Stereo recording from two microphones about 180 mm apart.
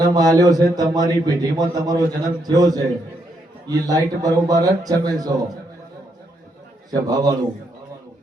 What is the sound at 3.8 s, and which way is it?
Speech, 20° right (ahead or behind).